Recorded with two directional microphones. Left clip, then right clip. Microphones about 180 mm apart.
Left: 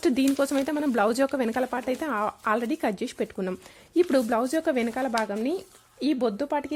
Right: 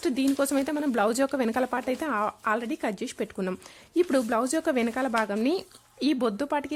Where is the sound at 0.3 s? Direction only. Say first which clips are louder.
Left 1 dB; centre (ahead or behind).